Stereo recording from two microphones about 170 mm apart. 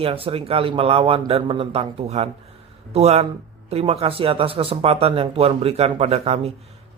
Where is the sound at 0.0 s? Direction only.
35° right (ahead or behind).